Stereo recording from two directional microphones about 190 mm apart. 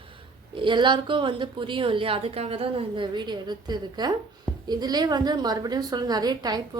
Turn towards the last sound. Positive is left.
turn(degrees=-20)  # may be behind; listen again after turning